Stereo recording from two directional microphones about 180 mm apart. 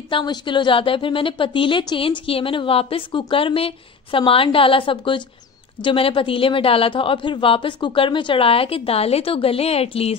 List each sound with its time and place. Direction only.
0.1 s a woman's voice: 25° left (ahead or behind)